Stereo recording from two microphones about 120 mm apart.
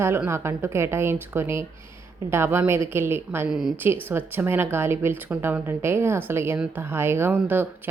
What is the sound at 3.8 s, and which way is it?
A woman's voice, 20° right (ahead or behind).